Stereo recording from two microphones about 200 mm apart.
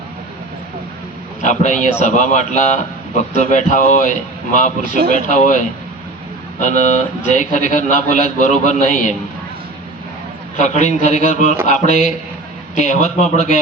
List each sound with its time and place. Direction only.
1.4 s speech: 35° left (ahead or behind)
4.8 s speech: 50° right (ahead or behind)
5.1 s speech: 40° left (ahead or behind)
6.6 s speech: 40° left (ahead or behind)
10.6 s speech: 35° left (ahead or behind)